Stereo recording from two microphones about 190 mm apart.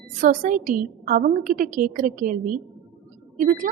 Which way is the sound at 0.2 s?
45° right (ahead or behind).